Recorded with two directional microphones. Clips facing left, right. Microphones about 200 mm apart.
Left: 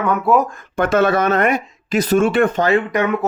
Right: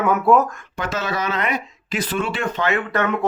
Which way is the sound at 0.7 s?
55° left (ahead or behind).